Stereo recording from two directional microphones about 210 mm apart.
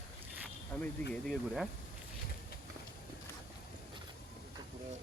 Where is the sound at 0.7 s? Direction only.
10° left (ahead or behind).